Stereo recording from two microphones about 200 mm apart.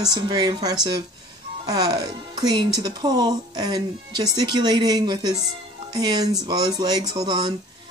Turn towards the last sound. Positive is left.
turn(degrees=-20)  # may be behind; listen again after turning